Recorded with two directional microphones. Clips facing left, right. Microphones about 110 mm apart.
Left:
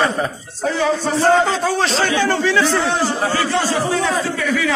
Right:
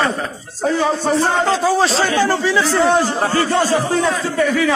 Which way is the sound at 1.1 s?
Centre (ahead or behind).